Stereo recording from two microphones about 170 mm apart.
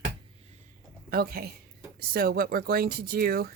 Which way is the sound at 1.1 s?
60° right (ahead or behind).